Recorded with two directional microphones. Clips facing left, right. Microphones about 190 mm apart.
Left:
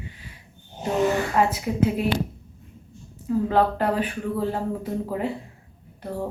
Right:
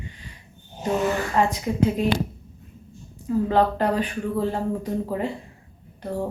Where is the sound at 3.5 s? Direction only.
5° left (ahead or behind).